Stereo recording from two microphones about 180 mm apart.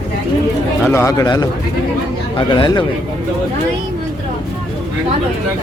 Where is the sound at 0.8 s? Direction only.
15° left (ahead or behind).